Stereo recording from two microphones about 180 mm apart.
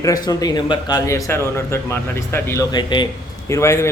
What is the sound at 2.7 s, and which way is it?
Speech, 25° left (ahead or behind).